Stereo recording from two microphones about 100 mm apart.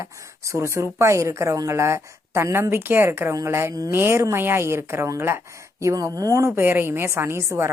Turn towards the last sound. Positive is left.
turn(degrees=-25)  # may be behind; listen again after turning